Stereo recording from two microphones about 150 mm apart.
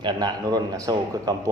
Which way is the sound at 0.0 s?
30° right (ahead or behind).